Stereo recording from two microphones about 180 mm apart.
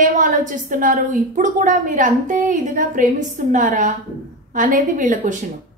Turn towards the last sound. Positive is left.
turn(degrees=-45)  # may be behind; listen again after turning